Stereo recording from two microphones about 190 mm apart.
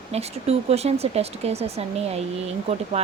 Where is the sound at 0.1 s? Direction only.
35° right (ahead or behind).